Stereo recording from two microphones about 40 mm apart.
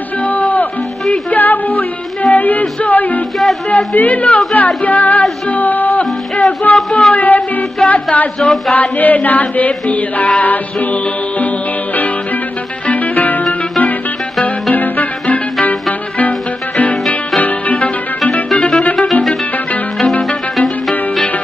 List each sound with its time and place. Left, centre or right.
0.2 s music: left
1.3 s female singing: left
2.6 s music: left
3.7 s speech: left
5.5 s music: left
7.8 s speech: left
8.6 s music: left
18.5 s music: left